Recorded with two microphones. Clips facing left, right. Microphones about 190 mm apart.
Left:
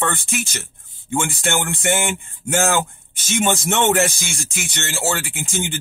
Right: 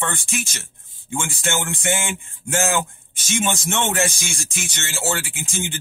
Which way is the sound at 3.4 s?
60° left (ahead or behind).